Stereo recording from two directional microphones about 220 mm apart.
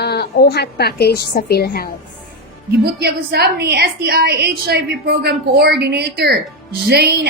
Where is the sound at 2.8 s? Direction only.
45° right (ahead or behind).